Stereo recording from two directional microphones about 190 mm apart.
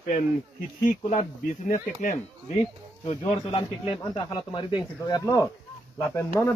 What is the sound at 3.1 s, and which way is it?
Speech, 30° left (ahead or behind).